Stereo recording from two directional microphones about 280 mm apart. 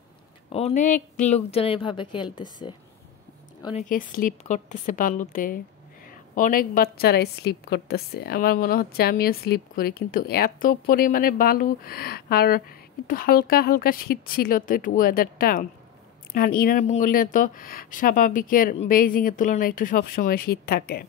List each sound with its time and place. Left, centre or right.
0.5 s speech: left
3.9 s a woman's voice: left